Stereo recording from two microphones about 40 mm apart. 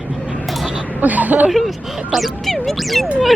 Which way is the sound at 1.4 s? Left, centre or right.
Centre.